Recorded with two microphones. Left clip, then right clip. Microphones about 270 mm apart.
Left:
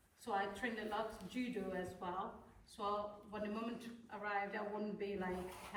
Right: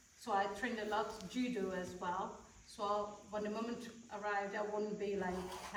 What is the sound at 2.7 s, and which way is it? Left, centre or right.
A woman's voice, centre.